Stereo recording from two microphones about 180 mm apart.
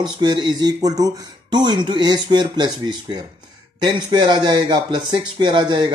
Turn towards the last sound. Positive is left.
turn(degrees=-25)  # may be behind; listen again after turning